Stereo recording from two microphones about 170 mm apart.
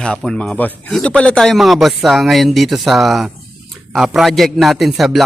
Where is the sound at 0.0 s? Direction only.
5° left (ahead or behind).